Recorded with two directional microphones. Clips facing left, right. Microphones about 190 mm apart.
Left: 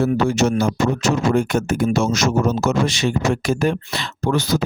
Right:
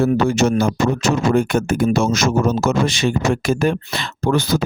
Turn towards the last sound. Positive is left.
turn(degrees=-55)  # may be behind; listen again after turning